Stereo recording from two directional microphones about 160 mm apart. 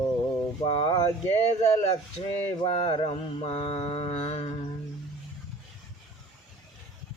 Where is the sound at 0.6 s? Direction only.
35° left (ahead or behind).